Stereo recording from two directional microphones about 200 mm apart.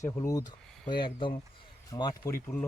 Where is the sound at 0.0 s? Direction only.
15° left (ahead or behind).